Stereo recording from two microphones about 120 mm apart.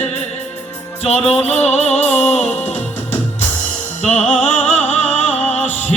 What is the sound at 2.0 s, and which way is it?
Music, 15° left (ahead or behind).